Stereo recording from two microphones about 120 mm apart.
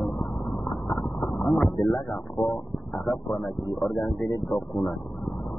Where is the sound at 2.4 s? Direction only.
40° left (ahead or behind).